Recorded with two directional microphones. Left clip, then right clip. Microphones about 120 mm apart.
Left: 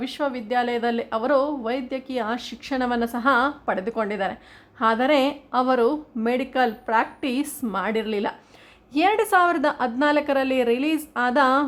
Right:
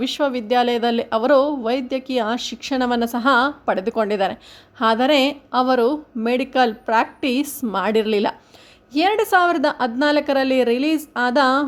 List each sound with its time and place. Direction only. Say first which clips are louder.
0.0 s speech: right 6 dB; 35° right (ahead or behind)
7.7 s a woman's voice: right 7 dB; 30° right (ahead or behind)
8.9 s a woman's voice: right 2 dB; 15° right (ahead or behind)